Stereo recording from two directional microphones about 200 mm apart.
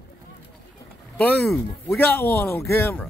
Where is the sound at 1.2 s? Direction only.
10° left (ahead or behind).